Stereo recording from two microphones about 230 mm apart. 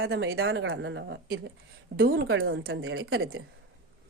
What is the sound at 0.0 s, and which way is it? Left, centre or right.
A woman's voice, right.